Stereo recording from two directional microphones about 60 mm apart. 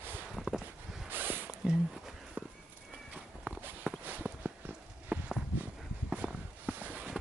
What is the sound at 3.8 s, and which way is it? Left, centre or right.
Walk, centre.